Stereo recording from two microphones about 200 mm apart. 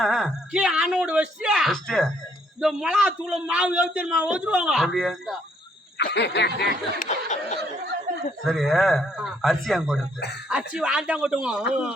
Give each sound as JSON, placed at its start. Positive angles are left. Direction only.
{"t": 0.0, "sound": "a man's voice", "side_deg": 0}
{"t": 6.0, "sound": "snicker", "side_deg": 60}
{"t": 6.6, "sound": "a sound", "side_deg": 40}
{"t": 8.4, "sound": "a man's voice", "side_deg": 0}